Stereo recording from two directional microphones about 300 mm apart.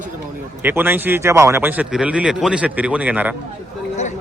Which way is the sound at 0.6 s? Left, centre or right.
Centre.